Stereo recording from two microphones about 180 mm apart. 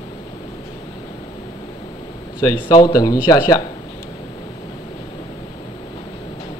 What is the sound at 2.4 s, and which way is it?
Speech, 20° left (ahead or behind).